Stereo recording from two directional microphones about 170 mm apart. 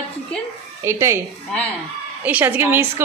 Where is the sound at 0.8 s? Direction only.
15° right (ahead or behind).